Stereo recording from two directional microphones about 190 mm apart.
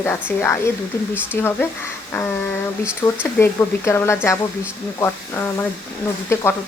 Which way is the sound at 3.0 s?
15° left (ahead or behind).